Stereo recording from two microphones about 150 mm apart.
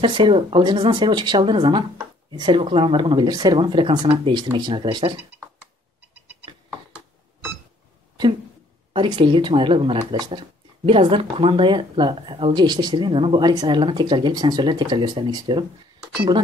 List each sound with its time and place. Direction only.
0.0 s speech: 35° right (ahead or behind)
8.9 s speech: 30° right (ahead or behind)